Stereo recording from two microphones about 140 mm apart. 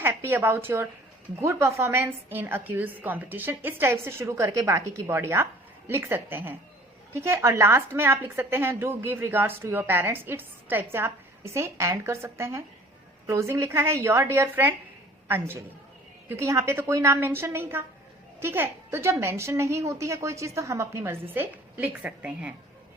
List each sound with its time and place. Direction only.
0.0 s a woman's voice: 15° right (ahead or behind)
16.3 s a woman's voice: 20° right (ahead or behind)